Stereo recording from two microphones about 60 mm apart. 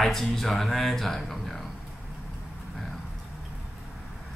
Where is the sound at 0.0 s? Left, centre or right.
Centre.